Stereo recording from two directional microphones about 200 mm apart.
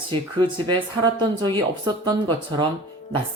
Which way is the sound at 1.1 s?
20° right (ahead or behind).